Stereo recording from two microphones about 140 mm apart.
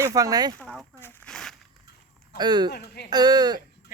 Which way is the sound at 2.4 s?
30° right (ahead or behind).